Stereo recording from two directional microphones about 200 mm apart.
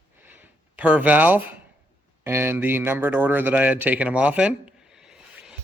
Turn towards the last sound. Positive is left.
turn(degrees=-5)  # may be behind; listen again after turning